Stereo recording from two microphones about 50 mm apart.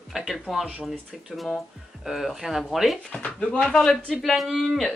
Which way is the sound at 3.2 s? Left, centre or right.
Left.